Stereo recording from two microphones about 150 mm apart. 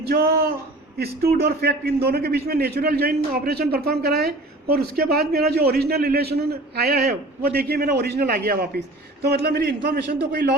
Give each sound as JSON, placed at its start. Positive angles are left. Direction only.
{"t": 0.1, "sound": "a man's voice", "side_deg": -90}